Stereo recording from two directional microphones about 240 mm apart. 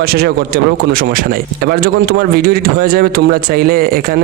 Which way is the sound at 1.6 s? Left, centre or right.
Right.